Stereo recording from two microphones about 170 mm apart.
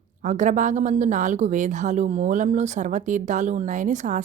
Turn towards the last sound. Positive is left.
turn(degrees=-45)  # may be behind; listen again after turning